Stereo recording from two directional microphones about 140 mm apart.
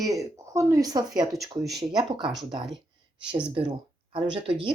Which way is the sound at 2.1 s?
35° right (ahead or behind).